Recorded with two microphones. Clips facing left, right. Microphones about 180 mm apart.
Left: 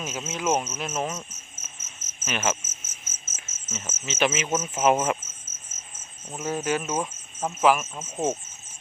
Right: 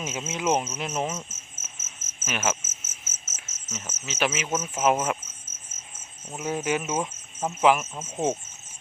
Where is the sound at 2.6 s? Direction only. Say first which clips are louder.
Left 1 dB; 50° right (ahead or behind).